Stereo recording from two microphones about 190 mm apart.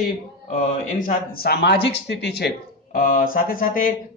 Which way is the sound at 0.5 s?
45° left (ahead or behind).